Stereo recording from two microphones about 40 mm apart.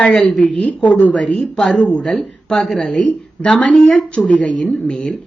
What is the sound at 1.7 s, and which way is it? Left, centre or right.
Speech, left.